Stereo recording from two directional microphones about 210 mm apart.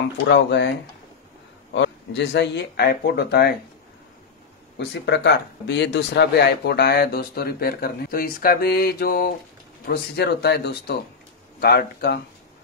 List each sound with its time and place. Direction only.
0.3 s speech: 55° left (ahead or behind)
4.7 s speech: 55° left (ahead or behind)